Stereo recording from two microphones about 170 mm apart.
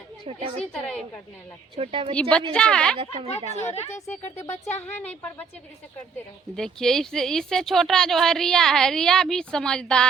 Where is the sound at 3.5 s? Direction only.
40° left (ahead or behind).